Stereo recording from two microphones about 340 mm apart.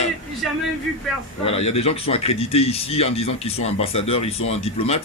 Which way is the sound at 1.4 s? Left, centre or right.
Centre.